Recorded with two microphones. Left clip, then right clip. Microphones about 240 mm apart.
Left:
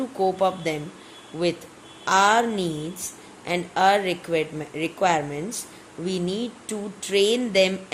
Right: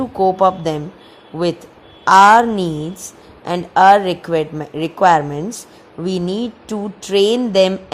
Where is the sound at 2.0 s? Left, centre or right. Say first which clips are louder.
Right 11 dB; right.